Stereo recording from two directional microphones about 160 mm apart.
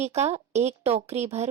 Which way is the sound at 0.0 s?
45° right (ahead or behind).